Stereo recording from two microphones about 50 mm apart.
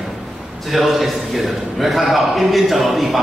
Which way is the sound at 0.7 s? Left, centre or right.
Centre.